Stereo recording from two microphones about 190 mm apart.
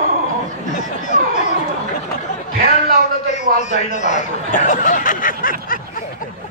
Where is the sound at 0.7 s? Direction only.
40° left (ahead or behind).